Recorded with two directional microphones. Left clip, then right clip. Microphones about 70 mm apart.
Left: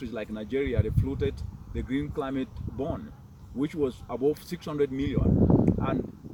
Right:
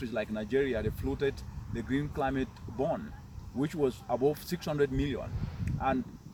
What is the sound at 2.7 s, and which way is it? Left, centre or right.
Speech, right.